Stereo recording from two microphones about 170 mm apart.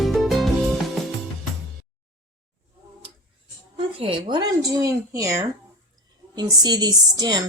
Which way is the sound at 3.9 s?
30° right (ahead or behind).